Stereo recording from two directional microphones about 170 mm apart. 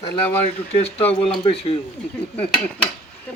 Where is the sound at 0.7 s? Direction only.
35° left (ahead or behind).